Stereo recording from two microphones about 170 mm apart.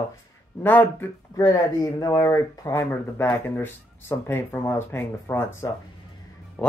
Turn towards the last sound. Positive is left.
turn(degrees=15)  # may be behind; listen again after turning